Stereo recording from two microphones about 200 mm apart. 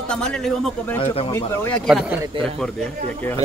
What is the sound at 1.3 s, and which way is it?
Speech, 10° left (ahead or behind).